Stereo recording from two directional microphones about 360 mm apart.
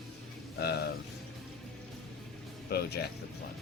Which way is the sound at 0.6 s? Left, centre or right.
Left.